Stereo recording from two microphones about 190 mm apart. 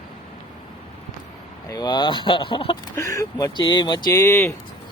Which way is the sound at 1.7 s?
25° left (ahead or behind).